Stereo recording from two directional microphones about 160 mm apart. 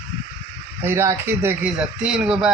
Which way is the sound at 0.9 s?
15° right (ahead or behind).